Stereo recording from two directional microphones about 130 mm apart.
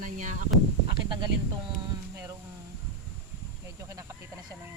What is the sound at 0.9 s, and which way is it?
Speech, 35° right (ahead or behind).